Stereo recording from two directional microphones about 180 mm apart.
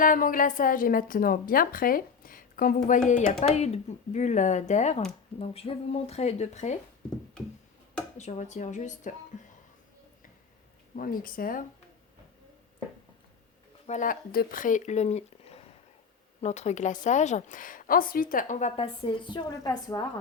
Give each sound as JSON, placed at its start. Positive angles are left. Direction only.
{"t": 0.0, "sound": "a woman's voice", "side_deg": 50}
{"t": 8.2, "sound": "speech", "side_deg": 40}
{"t": 9.3, "sound": "a sound", "side_deg": 45}
{"t": 10.9, "sound": "speech", "side_deg": 50}
{"t": 13.8, "sound": "a woman's voice", "side_deg": 45}